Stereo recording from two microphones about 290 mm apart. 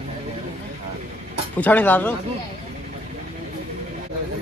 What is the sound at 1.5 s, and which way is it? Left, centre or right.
Speech, centre.